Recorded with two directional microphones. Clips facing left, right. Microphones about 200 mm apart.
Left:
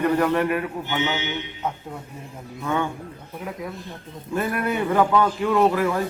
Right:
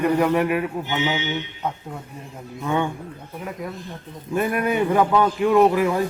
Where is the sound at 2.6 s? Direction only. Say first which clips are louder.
Right 2 dB; 15° right (ahead or behind).